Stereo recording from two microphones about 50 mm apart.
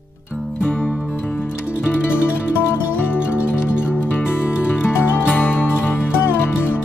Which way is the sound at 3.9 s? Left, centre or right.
Left.